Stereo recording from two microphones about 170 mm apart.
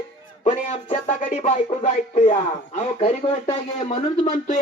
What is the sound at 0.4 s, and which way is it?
Music, 45° left (ahead or behind).